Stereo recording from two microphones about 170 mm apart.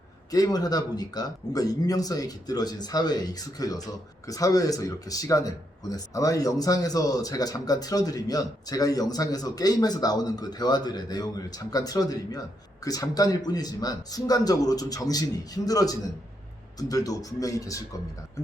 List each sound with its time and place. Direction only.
0.3 s speech: 20° left (ahead or behind)